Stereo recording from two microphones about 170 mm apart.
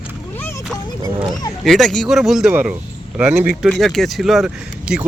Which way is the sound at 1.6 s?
Centre (ahead or behind).